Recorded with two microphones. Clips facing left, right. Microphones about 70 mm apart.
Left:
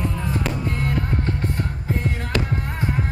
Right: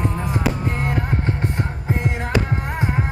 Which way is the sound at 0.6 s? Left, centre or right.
Right.